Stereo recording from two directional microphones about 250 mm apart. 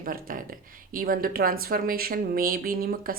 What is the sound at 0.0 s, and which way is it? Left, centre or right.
Speech, right.